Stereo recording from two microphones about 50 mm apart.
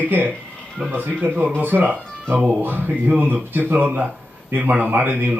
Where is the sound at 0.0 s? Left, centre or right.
Right.